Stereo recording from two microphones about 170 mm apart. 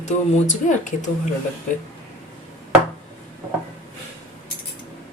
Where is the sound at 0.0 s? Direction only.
45° left (ahead or behind).